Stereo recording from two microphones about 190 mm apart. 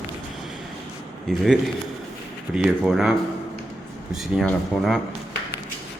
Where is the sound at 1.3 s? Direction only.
Centre (ahead or behind).